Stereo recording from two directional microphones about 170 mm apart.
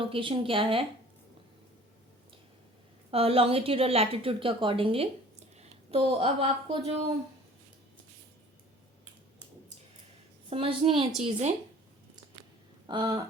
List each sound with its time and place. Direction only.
0.0 s a woman's voice: 30° right (ahead or behind)
3.1 s a woman's voice: 35° right (ahead or behind)
10.5 s a woman's voice: 30° right (ahead or behind)
12.9 s a sound: 25° right (ahead or behind)